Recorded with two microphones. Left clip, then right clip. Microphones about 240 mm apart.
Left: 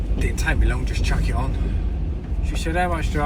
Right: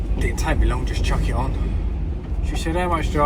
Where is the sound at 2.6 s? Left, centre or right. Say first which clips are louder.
Right 1 dB; centre.